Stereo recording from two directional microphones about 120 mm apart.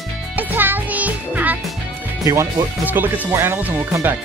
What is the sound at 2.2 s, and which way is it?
Speech, 25° right (ahead or behind).